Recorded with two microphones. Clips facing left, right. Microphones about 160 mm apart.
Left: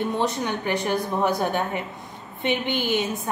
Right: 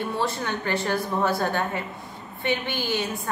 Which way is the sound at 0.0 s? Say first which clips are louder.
Left 3 dB; 20° left (ahead or behind).